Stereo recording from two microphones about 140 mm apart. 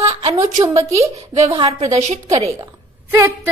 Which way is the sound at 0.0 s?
45° right (ahead or behind).